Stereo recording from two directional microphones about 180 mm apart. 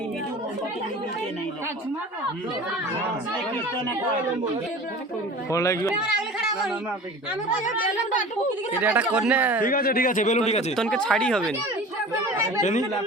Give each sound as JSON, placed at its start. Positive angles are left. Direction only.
{"t": 5.5, "sound": "speech", "side_deg": 15}
{"t": 7.6, "sound": "a man's voice", "side_deg": 45}
{"t": 8.8, "sound": "speech", "side_deg": -10}
{"t": 9.6, "sound": "a man's voice", "side_deg": 55}
{"t": 10.8, "sound": "speech", "side_deg": 5}